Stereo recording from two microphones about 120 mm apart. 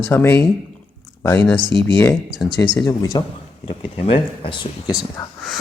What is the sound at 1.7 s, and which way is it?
Speech, 45° right (ahead or behind).